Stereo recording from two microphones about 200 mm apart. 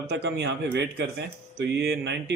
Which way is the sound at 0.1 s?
60° right (ahead or behind).